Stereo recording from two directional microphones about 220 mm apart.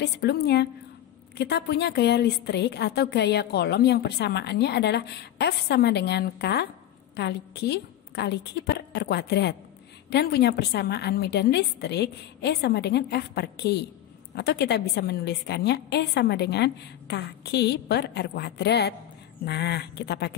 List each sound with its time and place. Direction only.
0.0 s a woman's voice: 45° left (ahead or behind)